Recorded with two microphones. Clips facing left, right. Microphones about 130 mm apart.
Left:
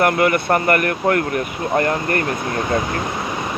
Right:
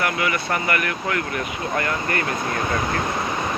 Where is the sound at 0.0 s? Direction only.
50° left (ahead or behind).